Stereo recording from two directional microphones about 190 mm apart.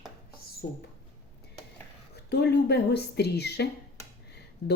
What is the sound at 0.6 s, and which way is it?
Speech, 60° left (ahead or behind).